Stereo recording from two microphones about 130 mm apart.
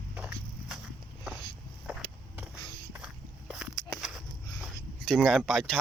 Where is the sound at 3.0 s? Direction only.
10° right (ahead or behind).